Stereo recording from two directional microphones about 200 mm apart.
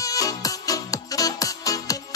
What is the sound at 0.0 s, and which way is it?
Music, 15° left (ahead or behind).